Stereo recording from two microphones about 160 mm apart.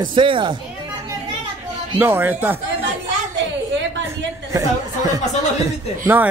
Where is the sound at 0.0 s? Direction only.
30° right (ahead or behind).